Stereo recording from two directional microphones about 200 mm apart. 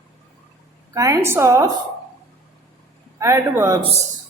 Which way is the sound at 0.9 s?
15° right (ahead or behind).